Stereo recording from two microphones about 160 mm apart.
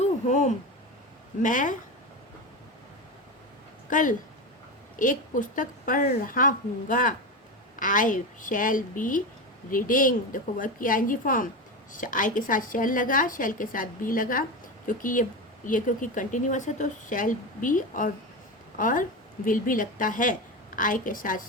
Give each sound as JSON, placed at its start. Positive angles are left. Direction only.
{"t": 0.0, "sound": "a sound", "side_deg": 50}
{"t": 1.4, "sound": "speech", "side_deg": 55}
{"t": 3.8, "sound": "speech", "side_deg": 55}